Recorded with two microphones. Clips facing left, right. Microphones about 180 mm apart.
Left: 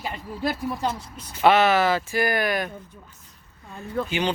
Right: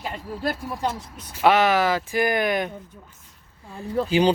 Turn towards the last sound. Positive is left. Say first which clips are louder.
# right 7 dB
turn(degrees=-35)  # may be behind; listen again after turning